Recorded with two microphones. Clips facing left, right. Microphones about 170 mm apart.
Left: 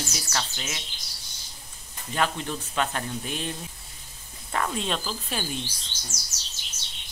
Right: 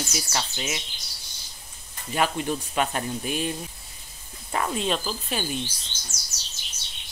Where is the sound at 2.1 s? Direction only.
10° right (ahead or behind).